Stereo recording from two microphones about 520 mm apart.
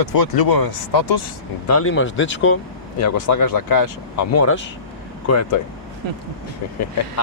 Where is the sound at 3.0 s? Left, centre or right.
Left.